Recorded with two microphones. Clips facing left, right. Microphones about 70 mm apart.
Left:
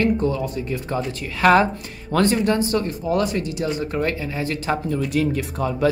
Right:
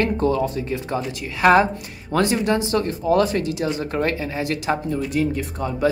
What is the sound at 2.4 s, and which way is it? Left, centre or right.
Speech, right.